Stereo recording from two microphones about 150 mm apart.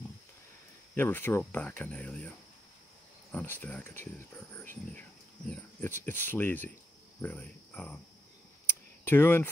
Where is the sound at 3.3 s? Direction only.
15° left (ahead or behind).